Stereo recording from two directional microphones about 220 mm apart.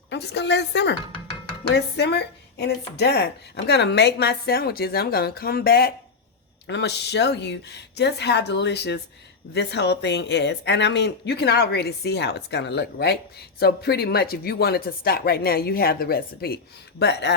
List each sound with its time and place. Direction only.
0.1 s speech: 50° left (ahead or behind)